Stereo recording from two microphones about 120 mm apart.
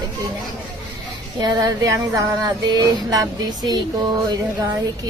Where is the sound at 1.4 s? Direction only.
35° right (ahead or behind).